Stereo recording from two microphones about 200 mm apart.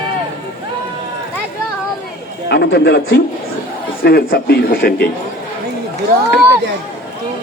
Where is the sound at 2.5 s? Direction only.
55° left (ahead or behind).